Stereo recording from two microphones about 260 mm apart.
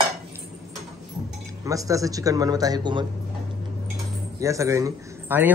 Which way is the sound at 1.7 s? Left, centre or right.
Centre.